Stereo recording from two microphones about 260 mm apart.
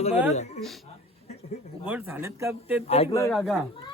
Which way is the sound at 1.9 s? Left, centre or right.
Centre.